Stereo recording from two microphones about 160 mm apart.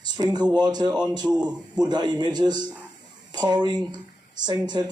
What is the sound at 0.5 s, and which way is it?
Speech, 25° right (ahead or behind).